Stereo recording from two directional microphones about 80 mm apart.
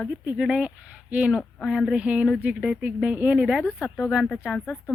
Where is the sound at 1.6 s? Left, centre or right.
Centre.